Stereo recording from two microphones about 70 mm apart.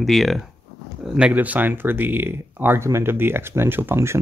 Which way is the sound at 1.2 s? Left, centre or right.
Centre.